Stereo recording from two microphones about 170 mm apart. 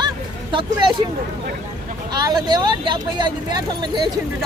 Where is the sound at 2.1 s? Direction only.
25° right (ahead or behind).